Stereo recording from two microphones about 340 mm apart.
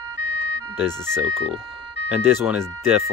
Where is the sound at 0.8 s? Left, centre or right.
Centre.